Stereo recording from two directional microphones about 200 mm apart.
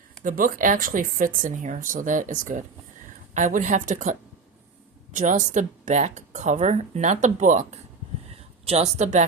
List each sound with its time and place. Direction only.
0.3 s speech: 40° right (ahead or behind)
5.1 s a woman's voice: 40° right (ahead or behind)